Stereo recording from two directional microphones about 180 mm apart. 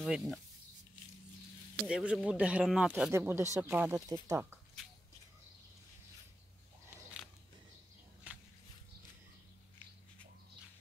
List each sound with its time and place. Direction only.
0.0 s speech: centre (ahead or behind)
1.8 s speech: 5° right (ahead or behind)
8.3 s a sound: 10° right (ahead or behind)